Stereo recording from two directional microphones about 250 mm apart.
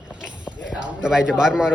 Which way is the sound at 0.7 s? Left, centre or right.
Centre.